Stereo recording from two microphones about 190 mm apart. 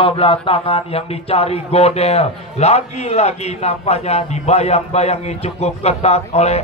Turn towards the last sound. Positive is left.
turn(degrees=35)  # may be behind; listen again after turning